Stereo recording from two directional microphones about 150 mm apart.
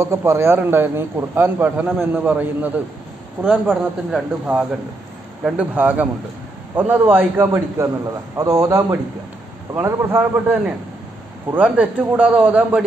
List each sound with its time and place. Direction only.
0.0 s a man's voice: 15° right (ahead or behind)